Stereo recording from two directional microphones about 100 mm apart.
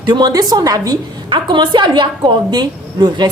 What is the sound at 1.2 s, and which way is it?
A woman's voice, 55° right (ahead or behind).